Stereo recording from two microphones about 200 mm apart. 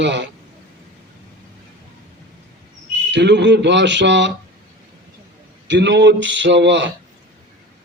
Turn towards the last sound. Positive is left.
turn(degrees=-65)  # may be behind; listen again after turning